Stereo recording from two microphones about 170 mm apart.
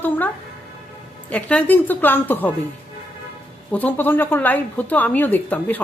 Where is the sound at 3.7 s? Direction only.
10° left (ahead or behind).